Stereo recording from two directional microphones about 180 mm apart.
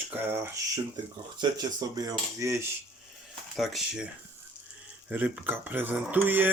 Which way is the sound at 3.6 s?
Centre (ahead or behind).